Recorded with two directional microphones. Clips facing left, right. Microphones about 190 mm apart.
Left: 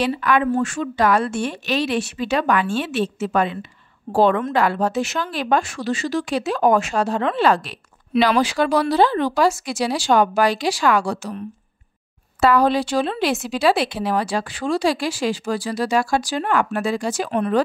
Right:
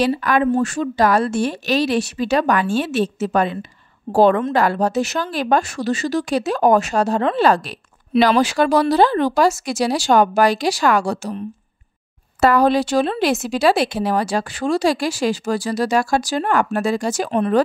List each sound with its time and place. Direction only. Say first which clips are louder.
0.0 s speech: right 2 dB; 40° right (ahead or behind)
12.4 s speech: right 2 dB; 45° right (ahead or behind)